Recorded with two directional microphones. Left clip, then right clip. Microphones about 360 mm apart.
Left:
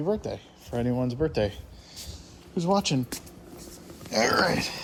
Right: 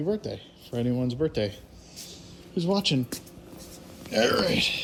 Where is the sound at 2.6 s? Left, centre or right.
Centre.